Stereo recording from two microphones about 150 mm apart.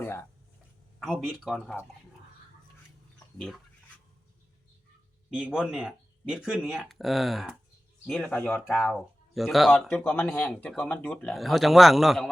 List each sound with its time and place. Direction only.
0.0 s speech: 15° left (ahead or behind)
1.2 s speech: centre (ahead or behind)
3.3 s speech: 5° left (ahead or behind)
5.3 s speech: 5° right (ahead or behind)
9.9 s speech: 15° left (ahead or behind)